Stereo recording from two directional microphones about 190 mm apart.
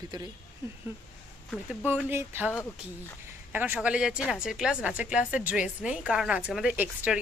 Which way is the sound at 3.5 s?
10° right (ahead or behind).